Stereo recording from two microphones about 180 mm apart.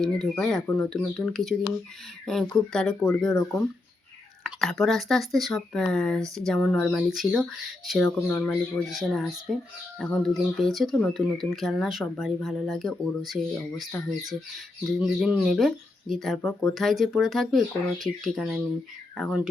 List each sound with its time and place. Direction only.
0.0 s speech: centre (ahead or behind)
4.4 s speech: centre (ahead or behind)